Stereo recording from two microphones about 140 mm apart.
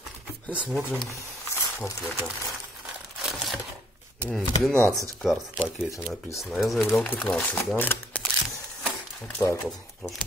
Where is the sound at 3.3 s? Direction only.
Centre (ahead or behind).